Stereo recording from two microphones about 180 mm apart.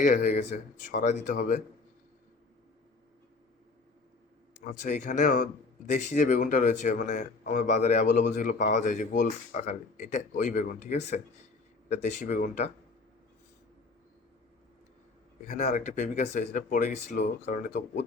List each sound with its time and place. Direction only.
0.0 s speech: 45° left (ahead or behind)
4.6 s speech: 45° left (ahead or behind)
15.4 s speech: 40° left (ahead or behind)